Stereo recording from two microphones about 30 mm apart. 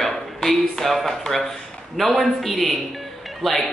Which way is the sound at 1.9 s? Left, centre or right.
Centre.